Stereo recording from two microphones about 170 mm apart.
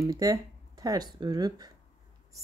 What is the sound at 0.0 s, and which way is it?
A woman's voice, 20° right (ahead or behind).